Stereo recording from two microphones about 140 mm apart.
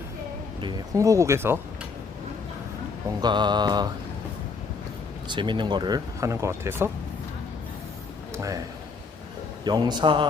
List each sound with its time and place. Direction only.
0.9 s speech: 20° right (ahead or behind)
3.2 s mantra: 30° right (ahead or behind)
5.3 s speech: 35° right (ahead or behind); by 6.9 s 15° right (ahead or behind)
8.3 s a sound: 20° right (ahead or behind)
9.6 s mantra: 30° right (ahead or behind)